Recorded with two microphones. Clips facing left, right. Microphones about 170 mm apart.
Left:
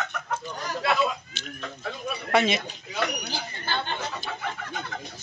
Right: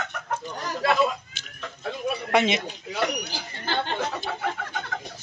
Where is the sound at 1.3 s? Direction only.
10° right (ahead or behind).